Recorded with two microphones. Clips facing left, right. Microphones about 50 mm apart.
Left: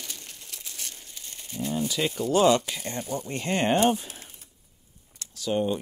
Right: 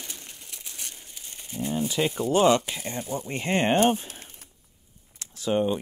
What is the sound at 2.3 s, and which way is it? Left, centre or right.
Speech, right.